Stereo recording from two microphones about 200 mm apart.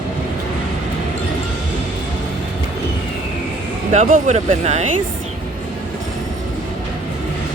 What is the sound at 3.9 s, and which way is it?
Speech, 40° right (ahead or behind).